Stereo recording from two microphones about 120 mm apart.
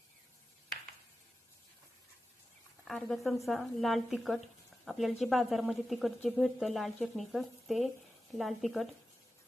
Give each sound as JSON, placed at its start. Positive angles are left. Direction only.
{"t": 2.8, "sound": "speech", "side_deg": 0}